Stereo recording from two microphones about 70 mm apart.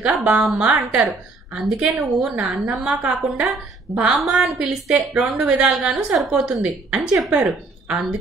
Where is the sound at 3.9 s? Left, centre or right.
Right.